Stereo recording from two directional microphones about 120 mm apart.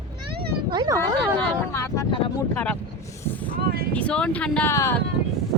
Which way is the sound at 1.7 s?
25° left (ahead or behind).